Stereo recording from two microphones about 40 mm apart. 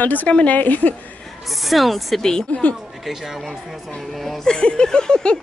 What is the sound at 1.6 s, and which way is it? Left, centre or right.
Speech, centre.